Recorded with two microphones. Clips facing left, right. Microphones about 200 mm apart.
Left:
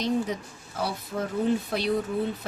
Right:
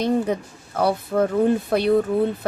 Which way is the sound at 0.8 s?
55° right (ahead or behind).